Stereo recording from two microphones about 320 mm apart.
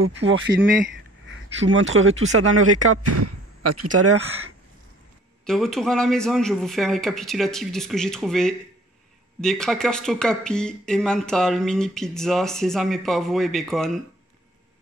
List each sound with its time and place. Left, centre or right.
0.0 s speech: right
5.5 s speech: centre